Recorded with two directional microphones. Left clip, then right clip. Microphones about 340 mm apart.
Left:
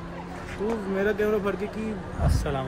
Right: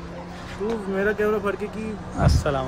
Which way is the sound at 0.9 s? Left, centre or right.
Centre.